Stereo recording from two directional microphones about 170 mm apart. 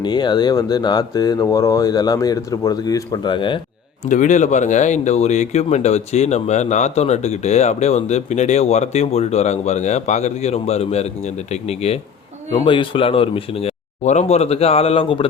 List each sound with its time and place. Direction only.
0.0 s speech: 25° left (ahead or behind)
4.1 s speech: 45° left (ahead or behind)